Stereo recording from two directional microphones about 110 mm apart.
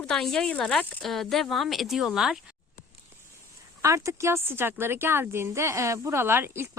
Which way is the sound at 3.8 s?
25° right (ahead or behind).